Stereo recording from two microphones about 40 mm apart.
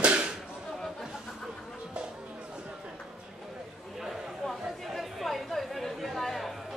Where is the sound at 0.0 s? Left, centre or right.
Right.